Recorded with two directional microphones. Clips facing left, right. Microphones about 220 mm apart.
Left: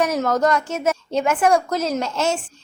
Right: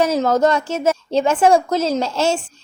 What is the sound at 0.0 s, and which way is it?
A woman's voice, 25° right (ahead or behind).